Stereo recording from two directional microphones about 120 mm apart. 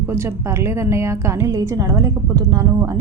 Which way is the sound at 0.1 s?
20° right (ahead or behind).